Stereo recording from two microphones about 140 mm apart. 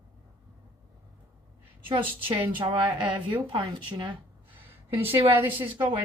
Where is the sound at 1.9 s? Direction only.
35° right (ahead or behind).